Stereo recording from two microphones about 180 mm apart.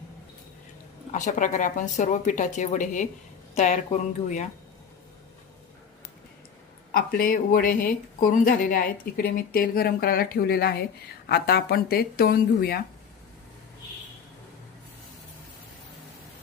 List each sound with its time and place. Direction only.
1.1 s a woman's voice: 45° left (ahead or behind)
6.9 s speech: 55° left (ahead or behind)